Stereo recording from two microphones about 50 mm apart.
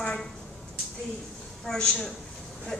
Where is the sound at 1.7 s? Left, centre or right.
Centre.